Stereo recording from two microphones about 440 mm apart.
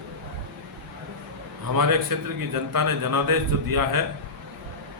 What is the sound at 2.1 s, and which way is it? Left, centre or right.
A man's voice, right.